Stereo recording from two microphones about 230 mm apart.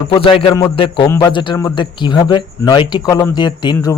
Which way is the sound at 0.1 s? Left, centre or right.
Left.